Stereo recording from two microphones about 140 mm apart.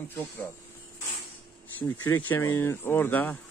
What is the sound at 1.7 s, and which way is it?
Speech, 15° left (ahead or behind).